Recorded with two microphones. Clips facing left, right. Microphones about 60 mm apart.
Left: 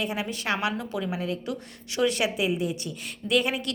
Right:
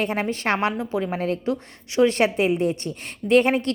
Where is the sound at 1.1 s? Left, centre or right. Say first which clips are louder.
Right 6 dB; right.